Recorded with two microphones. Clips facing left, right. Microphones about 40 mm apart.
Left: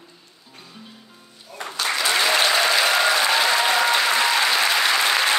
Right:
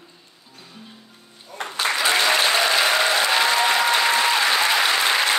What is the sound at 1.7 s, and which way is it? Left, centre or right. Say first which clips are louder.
Applause: right 1 dB; centre.